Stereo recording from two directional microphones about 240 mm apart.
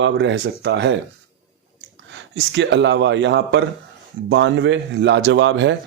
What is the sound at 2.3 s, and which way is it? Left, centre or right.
Speech, right.